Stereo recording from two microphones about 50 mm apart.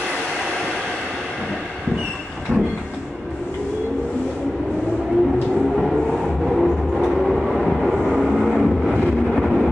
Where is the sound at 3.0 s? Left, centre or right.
Centre.